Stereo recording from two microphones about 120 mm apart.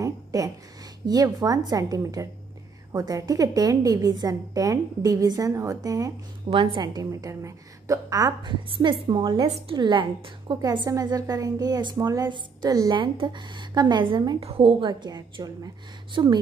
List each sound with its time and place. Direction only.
0.0 s a sound: 30° right (ahead or behind)
1.0 s a woman's voice: 30° right (ahead or behind)
6.5 s a woman's voice: 45° right (ahead or behind)
14.4 s a woman's voice: 50° right (ahead or behind); by 15.7 s 35° right (ahead or behind)
16.1 s speech: 45° right (ahead or behind)